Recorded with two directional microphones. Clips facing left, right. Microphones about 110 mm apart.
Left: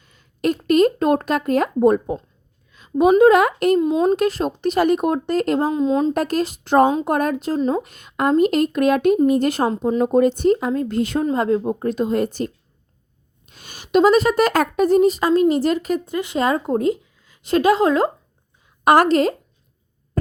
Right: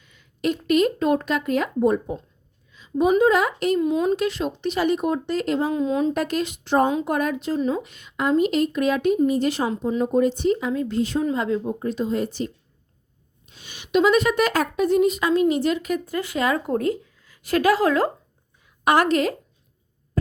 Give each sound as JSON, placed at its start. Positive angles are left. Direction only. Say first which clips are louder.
{"t": 0.0, "sound": "a sound", "louder": "left 3 dB", "side_deg": 40}
{"t": 2.7, "sound": "a woman's voice", "louder": "left 5 dB", "side_deg": 55}
{"t": 3.8, "sound": "speech", "louder": "left 3 dB", "side_deg": 30}
{"t": 4.0, "sound": "a woman's voice", "louder": "left 4 dB", "side_deg": 45}
{"t": 5.7, "sound": "speech", "louder": "left 4 dB", "side_deg": 25}
{"t": 6.1, "sound": "a woman's voice", "louder": "left 4 dB", "side_deg": 40}
{"t": 11.3, "sound": "a woman's voice", "louder": "left 4 dB", "side_deg": 45}
{"t": 13.5, "sound": "a woman's voice", "louder": "left 4 dB", "side_deg": 45}
{"t": 16.0, "sound": "speech", "louder": "left 2 dB", "side_deg": 20}
{"t": 18.9, "sound": "a woman's voice", "louder": "left 5 dB", "side_deg": 35}